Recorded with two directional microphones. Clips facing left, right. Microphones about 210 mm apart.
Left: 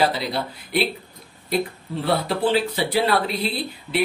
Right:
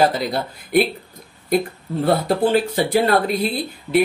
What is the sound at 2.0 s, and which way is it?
Speech, 45° right (ahead or behind).